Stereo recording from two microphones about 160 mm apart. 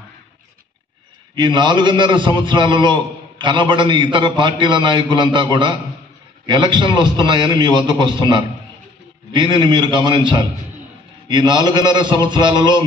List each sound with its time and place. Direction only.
1.3 s a man's voice: 30° right (ahead or behind)